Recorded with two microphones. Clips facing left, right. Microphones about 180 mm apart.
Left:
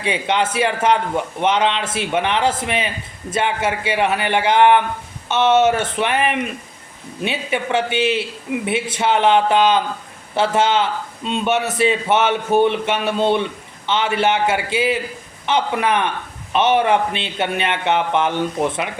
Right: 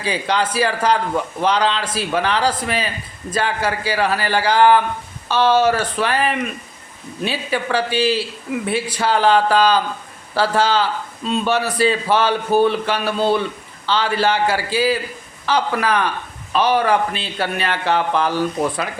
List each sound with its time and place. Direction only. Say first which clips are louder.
0.0 s a man's voice: left 1 dB; 25° left (ahead or behind)